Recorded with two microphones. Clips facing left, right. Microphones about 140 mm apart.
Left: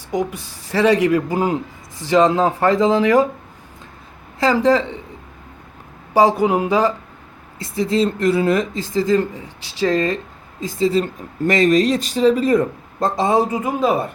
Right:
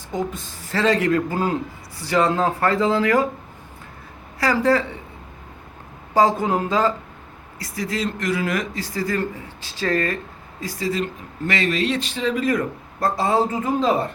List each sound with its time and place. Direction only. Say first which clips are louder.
0.1 s speech: left 4 dB; 15° left (ahead or behind)
4.4 s speech: left 4 dB; 20° left (ahead or behind)
6.1 s speech: left 3 dB; 15° left (ahead or behind)
7.6 s speech: left 8 dB; 25° left (ahead or behind); by 14.1 s 10° left (ahead or behind)